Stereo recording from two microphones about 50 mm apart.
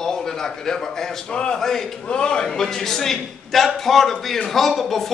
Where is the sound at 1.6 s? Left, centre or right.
Centre.